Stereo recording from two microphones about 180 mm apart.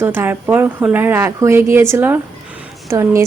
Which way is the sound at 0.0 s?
10° right (ahead or behind).